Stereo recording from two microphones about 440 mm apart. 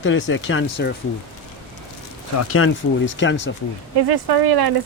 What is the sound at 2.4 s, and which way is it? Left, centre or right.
Speech, left.